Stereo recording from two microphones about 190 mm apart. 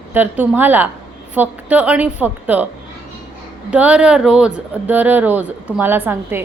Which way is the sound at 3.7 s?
5° right (ahead or behind).